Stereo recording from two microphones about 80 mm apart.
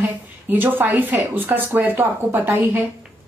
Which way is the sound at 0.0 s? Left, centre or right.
Right.